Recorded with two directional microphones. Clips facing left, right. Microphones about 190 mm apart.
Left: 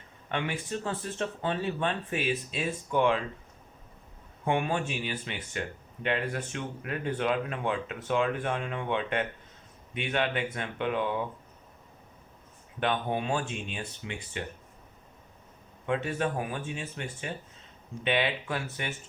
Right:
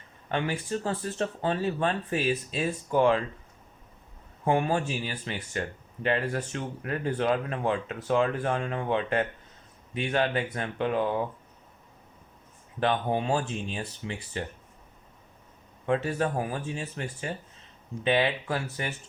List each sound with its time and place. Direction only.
0.3 s speech: 40° right (ahead or behind)
4.4 s speech: 35° right (ahead or behind)
12.8 s speech: 35° right (ahead or behind)
15.9 s speech: 40° right (ahead or behind)